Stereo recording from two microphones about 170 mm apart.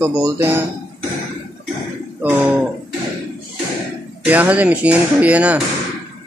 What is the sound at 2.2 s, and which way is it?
Speech, 10° right (ahead or behind).